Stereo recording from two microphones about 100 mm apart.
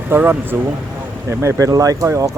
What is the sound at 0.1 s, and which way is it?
Speech, 20° right (ahead or behind).